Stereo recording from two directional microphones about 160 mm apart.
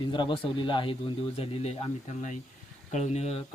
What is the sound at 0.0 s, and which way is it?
Speech, 30° left (ahead or behind).